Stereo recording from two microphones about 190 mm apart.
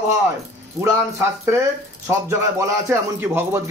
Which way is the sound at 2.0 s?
15° right (ahead or behind).